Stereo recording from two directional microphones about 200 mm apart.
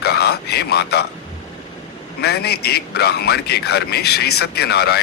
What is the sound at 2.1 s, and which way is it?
A man's voice, 55° left (ahead or behind).